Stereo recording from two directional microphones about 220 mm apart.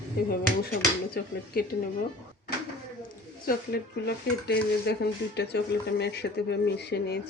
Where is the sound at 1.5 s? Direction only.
45° left (ahead or behind).